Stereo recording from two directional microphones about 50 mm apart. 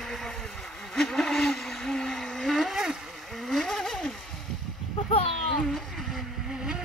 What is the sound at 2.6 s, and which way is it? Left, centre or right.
Vehicle, centre.